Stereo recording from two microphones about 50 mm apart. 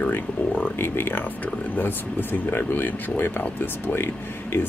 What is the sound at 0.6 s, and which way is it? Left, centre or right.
Speech, left.